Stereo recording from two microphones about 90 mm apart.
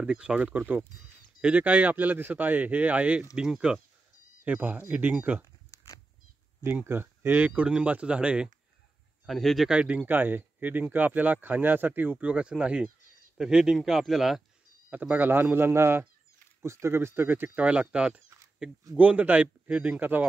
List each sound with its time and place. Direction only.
0.0 s a man's voice: 10° right (ahead or behind)
5.4 s a sound: 40° left (ahead or behind)
6.7 s a man's voice: 25° right (ahead or behind)
9.2 s speech: centre (ahead or behind)
9.8 s speech: 15° right (ahead or behind)
14.9 s a man's voice: 20° right (ahead or behind)